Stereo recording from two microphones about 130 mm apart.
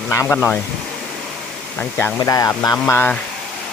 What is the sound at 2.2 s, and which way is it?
Speech, 25° left (ahead or behind).